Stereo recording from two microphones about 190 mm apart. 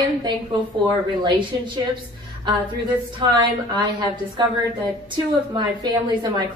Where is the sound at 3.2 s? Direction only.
20° right (ahead or behind).